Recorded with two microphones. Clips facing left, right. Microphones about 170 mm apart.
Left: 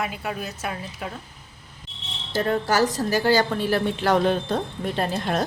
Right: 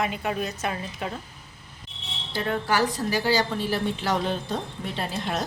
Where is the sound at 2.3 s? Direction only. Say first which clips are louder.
Left 3 dB; 40° left (ahead or behind).